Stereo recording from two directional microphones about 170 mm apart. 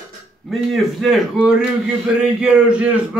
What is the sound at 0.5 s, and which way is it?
A man's voice, centre (ahead or behind).